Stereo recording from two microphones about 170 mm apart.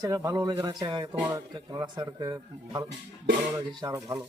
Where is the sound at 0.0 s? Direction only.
20° right (ahead or behind).